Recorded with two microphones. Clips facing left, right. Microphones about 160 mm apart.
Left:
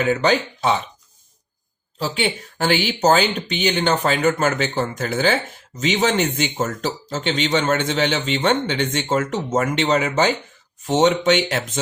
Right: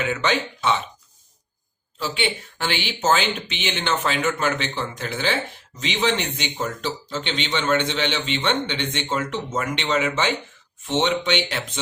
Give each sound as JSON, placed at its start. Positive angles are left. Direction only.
{"t": 0.0, "sound": "speech", "side_deg": 40}
{"t": 2.0, "sound": "speech", "side_deg": 40}